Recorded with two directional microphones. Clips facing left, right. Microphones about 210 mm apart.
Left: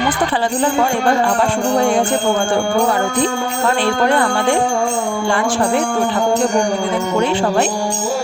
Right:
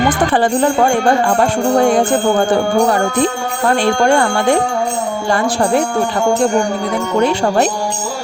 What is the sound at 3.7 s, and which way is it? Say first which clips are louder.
Jingle bell: right 3 dB; 45° right (ahead or behind).